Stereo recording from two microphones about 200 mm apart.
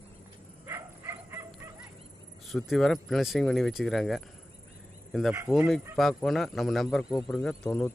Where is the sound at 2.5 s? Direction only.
Centre (ahead or behind).